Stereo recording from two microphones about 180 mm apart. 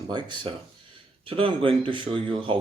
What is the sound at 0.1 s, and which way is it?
Speech, 25° right (ahead or behind).